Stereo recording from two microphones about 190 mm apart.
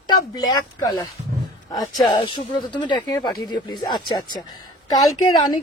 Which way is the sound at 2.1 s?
25° left (ahead or behind).